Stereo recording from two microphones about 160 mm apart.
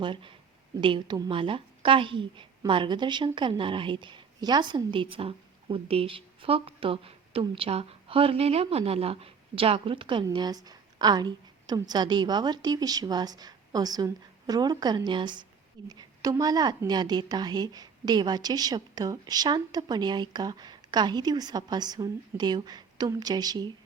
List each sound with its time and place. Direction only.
0.0 s a woman's voice: 30° right (ahead or behind)